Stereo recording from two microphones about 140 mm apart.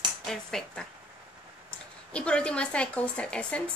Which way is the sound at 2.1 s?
5° left (ahead or behind).